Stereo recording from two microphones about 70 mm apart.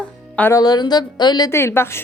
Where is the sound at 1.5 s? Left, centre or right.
Left.